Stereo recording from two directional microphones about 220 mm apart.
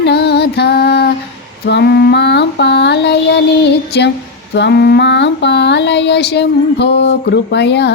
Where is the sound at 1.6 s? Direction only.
50° left (ahead or behind).